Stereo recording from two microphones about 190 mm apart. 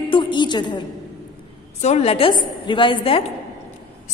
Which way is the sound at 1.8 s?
35° left (ahead or behind).